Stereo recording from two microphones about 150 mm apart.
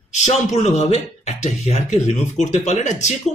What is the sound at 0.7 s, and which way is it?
Speech, 45° left (ahead or behind).